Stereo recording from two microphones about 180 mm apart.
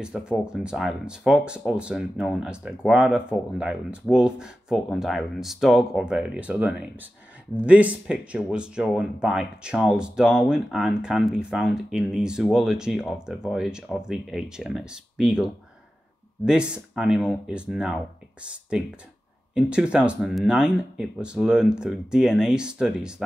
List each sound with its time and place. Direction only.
0.0 s speech: 5° right (ahead or behind)